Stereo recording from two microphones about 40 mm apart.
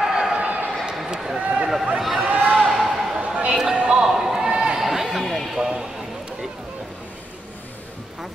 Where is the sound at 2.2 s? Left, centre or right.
Right.